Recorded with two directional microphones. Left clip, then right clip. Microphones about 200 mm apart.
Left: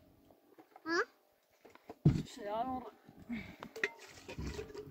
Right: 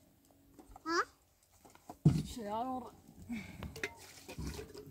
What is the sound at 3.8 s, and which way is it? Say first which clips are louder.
Stir: left 5 dB; 55° right (ahead or behind).